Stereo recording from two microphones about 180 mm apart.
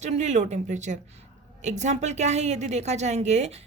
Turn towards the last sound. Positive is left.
turn(degrees=-40)  # may be behind; listen again after turning